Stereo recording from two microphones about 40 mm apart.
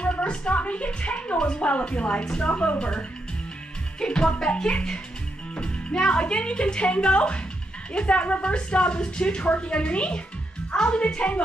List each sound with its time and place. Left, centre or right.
0.0 s a woman's voice: left